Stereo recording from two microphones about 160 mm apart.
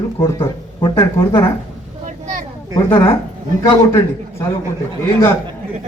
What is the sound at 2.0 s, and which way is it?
Vehicle, 50° right (ahead or behind).